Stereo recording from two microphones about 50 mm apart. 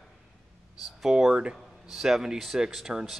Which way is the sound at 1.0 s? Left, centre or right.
Centre.